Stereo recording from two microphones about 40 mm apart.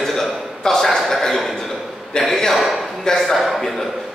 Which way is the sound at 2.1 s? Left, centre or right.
Left.